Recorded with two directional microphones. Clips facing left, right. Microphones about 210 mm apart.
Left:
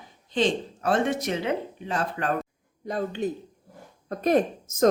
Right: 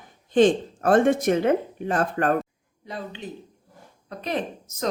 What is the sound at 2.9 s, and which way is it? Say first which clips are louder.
Speech: left 7 dB; 45° left (ahead or behind).